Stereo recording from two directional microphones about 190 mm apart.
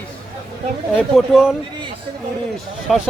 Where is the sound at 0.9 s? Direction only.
Centre (ahead or behind).